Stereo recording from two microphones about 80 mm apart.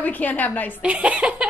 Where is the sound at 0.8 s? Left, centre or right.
Centre.